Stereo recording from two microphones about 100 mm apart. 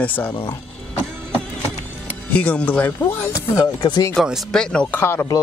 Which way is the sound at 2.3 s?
15° left (ahead or behind).